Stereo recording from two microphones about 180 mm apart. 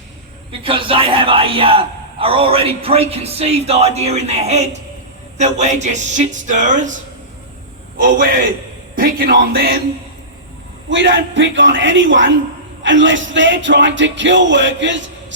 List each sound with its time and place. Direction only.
0.6 s a man's voice: 30° right (ahead or behind)
7.9 s speech: 50° right (ahead or behind)
10.8 s speech: 90° right